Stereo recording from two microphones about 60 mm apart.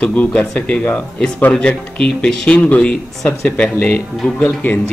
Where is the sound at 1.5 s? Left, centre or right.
Centre.